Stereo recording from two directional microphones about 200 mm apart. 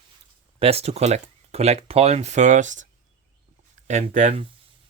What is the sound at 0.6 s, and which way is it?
Speech, 30° right (ahead or behind).